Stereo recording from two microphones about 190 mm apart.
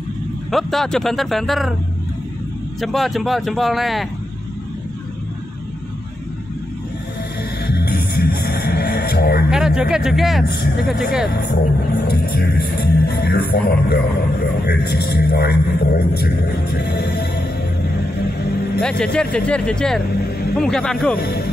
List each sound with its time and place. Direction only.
0.5 s speech: centre (ahead or behind)
2.8 s speech: centre (ahead or behind)
7.6 s music: 60° left (ahead or behind)
9.5 s speech: 5° right (ahead or behind)
10.4 s speech: 55° left (ahead or behind)
18.8 s speech: 5° left (ahead or behind)